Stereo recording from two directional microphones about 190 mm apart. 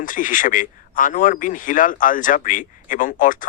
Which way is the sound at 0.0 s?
45° left (ahead or behind).